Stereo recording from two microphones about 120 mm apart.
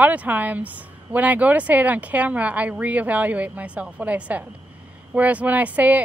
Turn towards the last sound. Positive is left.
turn(degrees=-15)  # may be behind; listen again after turning